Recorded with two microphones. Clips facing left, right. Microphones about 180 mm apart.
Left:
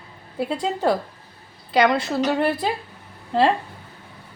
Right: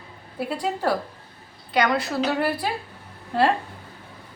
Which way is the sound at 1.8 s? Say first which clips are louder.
Left 3 dB; 25° left (ahead or behind).